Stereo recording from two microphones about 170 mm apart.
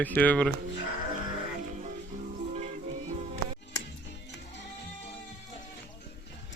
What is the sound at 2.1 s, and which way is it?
Music, 45° right (ahead or behind).